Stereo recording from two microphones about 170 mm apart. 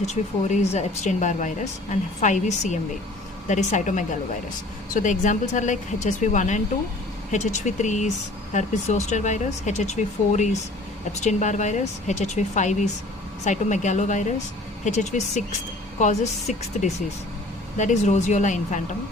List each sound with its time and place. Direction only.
0.0 s speech: 40° left (ahead or behind)